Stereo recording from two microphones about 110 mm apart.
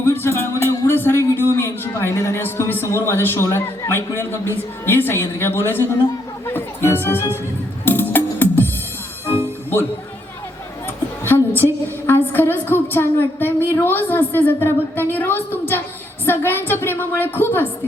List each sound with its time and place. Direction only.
0.0 s music: 20° left (ahead or behind)
1.5 s a woman's voice: 25° left (ahead or behind)
6.4 s music: 20° left (ahead or behind)
11.3 s a woman's voice: 20° left (ahead or behind)